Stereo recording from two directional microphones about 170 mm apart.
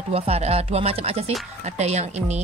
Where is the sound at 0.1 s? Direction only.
35° right (ahead or behind).